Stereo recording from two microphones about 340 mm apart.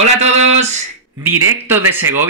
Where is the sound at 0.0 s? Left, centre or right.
Centre.